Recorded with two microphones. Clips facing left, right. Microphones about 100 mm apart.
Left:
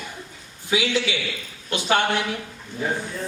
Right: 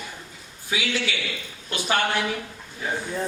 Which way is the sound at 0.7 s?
20° left (ahead or behind).